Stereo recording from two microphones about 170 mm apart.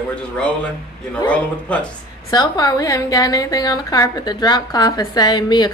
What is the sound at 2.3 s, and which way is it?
A woman's voice, 20° left (ahead or behind).